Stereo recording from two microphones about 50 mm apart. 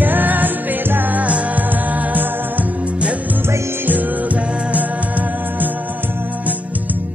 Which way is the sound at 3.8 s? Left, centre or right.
Right.